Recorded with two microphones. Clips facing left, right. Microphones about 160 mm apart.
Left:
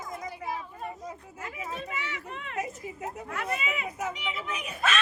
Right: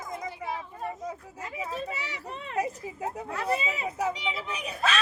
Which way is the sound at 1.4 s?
35° right (ahead or behind).